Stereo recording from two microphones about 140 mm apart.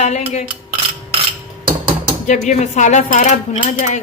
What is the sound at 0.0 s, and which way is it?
Cutlery, 55° left (ahead or behind).